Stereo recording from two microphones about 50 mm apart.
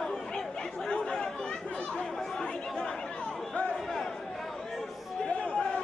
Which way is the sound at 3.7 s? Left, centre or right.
Centre.